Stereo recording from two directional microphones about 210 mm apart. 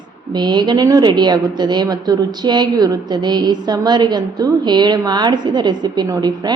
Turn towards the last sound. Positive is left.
turn(degrees=-20)  # may be behind; listen again after turning